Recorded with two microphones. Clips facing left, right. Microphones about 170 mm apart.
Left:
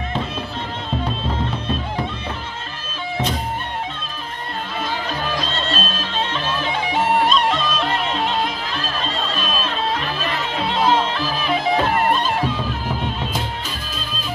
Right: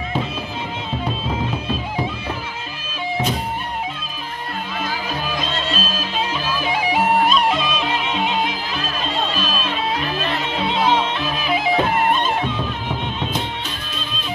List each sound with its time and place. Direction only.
1.0 s music: 5° right (ahead or behind)
5.4 s music: 5° right (ahead or behind)